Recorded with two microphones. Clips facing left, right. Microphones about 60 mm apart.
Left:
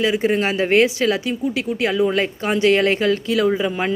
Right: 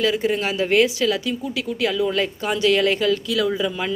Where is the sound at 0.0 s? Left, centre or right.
Left.